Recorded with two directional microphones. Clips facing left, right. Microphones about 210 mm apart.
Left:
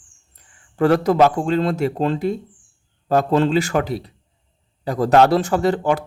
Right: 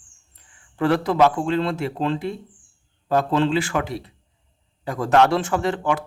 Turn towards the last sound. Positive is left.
turn(degrees=40)  # may be behind; listen again after turning